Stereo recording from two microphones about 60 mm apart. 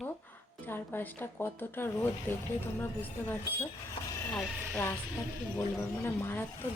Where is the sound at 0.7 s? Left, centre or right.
Left.